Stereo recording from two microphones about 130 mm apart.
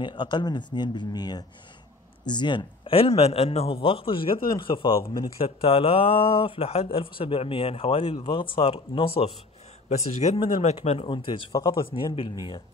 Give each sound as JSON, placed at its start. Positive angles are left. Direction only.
{"t": 0.0, "sound": "speech", "side_deg": 35}
{"t": 9.8, "sound": "speech", "side_deg": 55}